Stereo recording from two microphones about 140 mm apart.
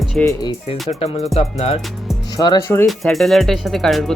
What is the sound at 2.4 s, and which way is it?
Speech, 30° left (ahead or behind).